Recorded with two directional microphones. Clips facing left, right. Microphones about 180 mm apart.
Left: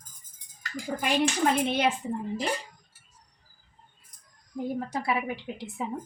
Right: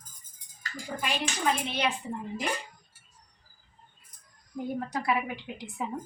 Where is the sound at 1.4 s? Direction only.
45° left (ahead or behind).